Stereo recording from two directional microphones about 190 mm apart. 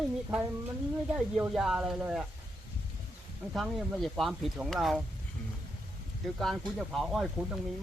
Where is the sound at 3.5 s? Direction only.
Centre (ahead or behind).